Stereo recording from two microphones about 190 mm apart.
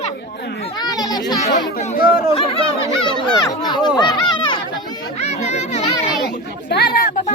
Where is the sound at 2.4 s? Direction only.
30° left (ahead or behind).